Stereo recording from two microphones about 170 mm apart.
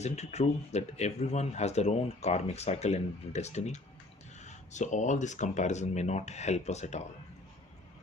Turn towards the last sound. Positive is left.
turn(degrees=40)  # may be behind; listen again after turning